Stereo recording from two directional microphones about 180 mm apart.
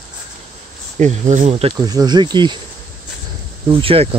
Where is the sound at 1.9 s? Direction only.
20° right (ahead or behind).